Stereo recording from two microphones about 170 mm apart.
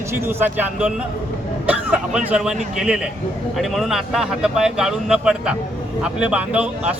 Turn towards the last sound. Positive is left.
turn(degrees=-5)  # may be behind; listen again after turning